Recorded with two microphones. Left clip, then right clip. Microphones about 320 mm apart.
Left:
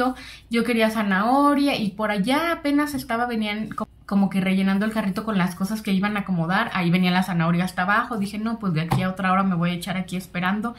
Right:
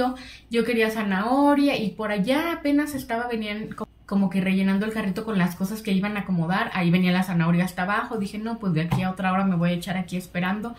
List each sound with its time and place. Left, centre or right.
0.0 s speech: centre